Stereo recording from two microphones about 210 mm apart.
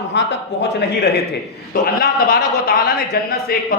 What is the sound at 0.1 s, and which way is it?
A man's voice, 55° left (ahead or behind).